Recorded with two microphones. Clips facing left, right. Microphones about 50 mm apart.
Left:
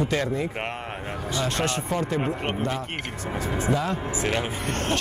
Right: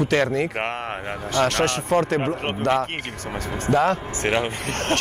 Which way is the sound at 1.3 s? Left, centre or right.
Right.